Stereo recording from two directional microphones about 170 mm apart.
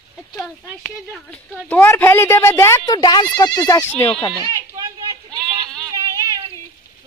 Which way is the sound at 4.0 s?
5° left (ahead or behind).